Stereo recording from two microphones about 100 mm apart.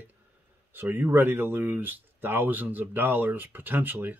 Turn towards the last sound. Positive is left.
turn(degrees=-20)  # may be behind; listen again after turning